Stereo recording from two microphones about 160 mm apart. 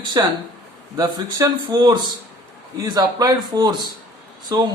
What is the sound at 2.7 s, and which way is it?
Speech, 25° right (ahead or behind).